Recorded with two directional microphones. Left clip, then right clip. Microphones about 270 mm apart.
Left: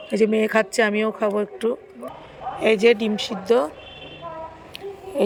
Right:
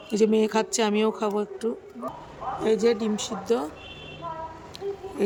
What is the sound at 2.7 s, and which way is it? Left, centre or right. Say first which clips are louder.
Speech: left 6 dB; centre.